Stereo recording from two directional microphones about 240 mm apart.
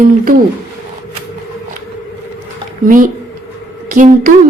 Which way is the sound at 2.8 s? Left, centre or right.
Right.